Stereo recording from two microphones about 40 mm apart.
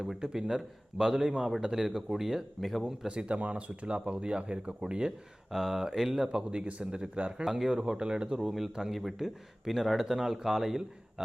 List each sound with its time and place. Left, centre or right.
0.2 s a man's voice: centre
2.6 s speech: centre
3.1 s speech: right
5.5 s a man's voice: centre
6.2 s speech: right
7.4 s a man's voice: centre
8.4 s a man's voice: centre